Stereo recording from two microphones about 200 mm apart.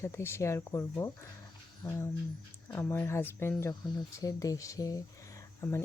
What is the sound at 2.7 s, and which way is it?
A woman's voice, 10° left (ahead or behind).